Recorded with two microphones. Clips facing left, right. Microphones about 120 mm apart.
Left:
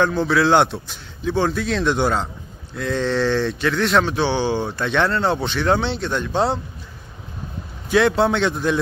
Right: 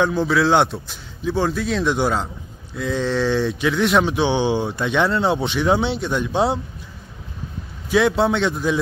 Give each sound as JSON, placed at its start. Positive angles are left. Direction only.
{"t": 0.0, "sound": "a man's voice", "side_deg": 0}
{"t": 4.0, "sound": "a man's voice", "side_deg": -15}
{"t": 7.9, "sound": "a man's voice", "side_deg": 0}